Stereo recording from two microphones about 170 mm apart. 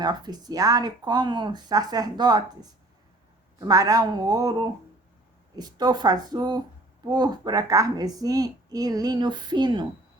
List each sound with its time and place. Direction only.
0.0 s a woman's voice: 25° right (ahead or behind)
5.5 s a woman's voice: 25° right (ahead or behind)